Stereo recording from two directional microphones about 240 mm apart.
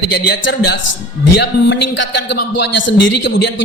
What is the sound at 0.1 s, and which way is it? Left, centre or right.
Speech, left.